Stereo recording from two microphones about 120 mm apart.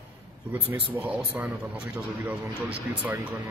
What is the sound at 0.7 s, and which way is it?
Speech, 15° right (ahead or behind).